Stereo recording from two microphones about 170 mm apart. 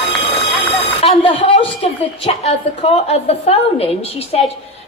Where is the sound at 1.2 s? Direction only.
30° left (ahead or behind).